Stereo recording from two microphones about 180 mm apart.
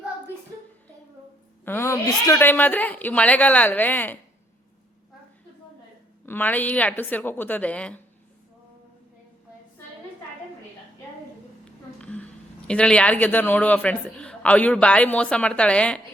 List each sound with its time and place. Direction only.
1.6 s speech: 15° left (ahead or behind)
6.2 s speech: 10° left (ahead or behind)
11.9 s speech: 5° left (ahead or behind)